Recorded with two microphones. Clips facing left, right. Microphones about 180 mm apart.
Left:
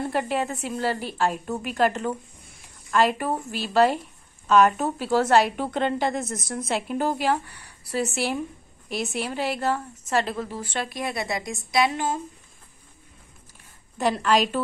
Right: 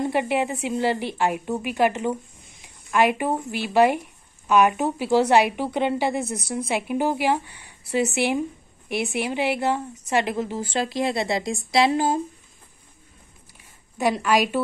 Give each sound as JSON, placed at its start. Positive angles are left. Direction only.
{"t": 0.0, "sound": "a woman's voice", "side_deg": -15}
{"t": 13.9, "sound": "speech", "side_deg": -10}